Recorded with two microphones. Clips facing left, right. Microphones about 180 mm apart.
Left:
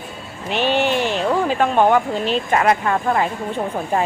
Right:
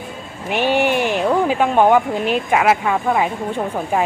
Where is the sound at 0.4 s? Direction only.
10° right (ahead or behind).